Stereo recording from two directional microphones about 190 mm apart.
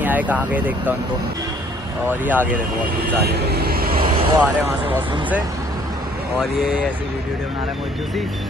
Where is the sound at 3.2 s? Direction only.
60° right (ahead or behind).